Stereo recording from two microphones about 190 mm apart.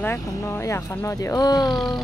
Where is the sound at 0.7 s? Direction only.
15° left (ahead or behind).